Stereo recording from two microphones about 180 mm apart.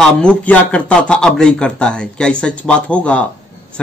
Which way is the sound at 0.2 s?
5° left (ahead or behind).